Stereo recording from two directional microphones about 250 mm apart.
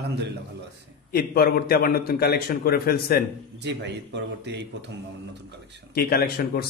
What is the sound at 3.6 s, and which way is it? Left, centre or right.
A man's voice, right.